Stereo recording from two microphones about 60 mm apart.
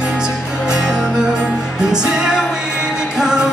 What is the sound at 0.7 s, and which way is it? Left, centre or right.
Music, centre.